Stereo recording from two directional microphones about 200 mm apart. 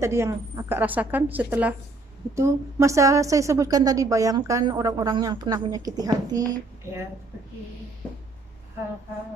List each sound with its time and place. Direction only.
0.0 s a woman's voice: 15° right (ahead or behind)